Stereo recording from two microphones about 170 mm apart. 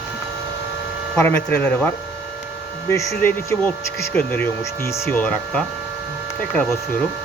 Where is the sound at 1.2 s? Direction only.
10° left (ahead or behind).